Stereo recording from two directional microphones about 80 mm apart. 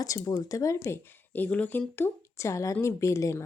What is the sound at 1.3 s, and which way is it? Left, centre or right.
A woman's voice, centre.